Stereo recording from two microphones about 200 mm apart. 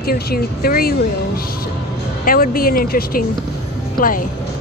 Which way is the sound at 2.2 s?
45° left (ahead or behind).